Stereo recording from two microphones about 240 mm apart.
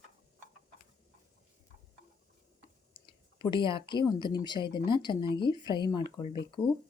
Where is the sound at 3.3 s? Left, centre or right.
Centre.